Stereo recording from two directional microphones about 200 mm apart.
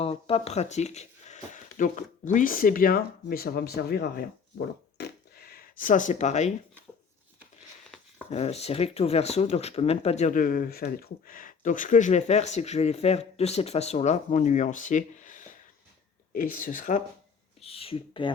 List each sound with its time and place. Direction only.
0.0 s speech: 30° left (ahead or behind)
8.3 s speech: 30° left (ahead or behind)
17.6 s speech: 30° left (ahead or behind)